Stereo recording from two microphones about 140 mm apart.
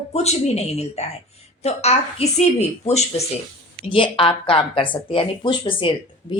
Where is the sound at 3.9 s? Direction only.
40° left (ahead or behind).